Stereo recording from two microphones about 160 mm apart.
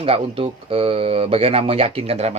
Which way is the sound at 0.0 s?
40° right (ahead or behind).